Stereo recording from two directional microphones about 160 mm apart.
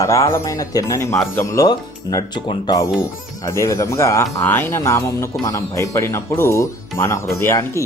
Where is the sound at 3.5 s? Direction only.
20° left (ahead or behind).